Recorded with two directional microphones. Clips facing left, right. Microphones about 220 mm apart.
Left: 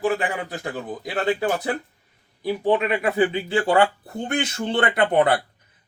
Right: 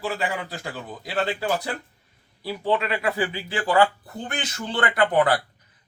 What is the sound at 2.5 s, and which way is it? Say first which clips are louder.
Speech: left 4 dB; 15° left (ahead or behind).